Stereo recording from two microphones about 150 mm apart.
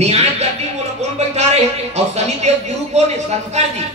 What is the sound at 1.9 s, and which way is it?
Speech, 45° right (ahead or behind).